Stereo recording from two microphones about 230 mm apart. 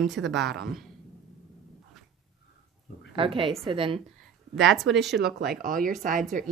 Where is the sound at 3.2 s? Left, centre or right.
Right.